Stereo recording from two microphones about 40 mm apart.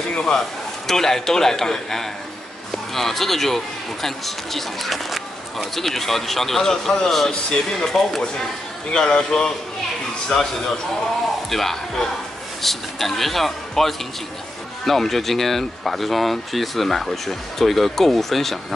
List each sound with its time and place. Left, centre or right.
0.1 s a man's voice: centre
11.5 s a man's voice: centre